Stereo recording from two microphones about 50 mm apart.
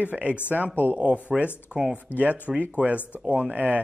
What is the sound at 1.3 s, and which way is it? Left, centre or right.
Speech, centre.